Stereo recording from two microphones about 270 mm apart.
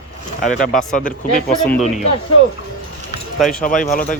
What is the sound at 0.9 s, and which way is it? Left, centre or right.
Speech, left.